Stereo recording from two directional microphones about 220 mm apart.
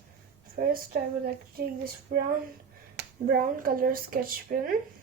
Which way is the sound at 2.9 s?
40° right (ahead or behind).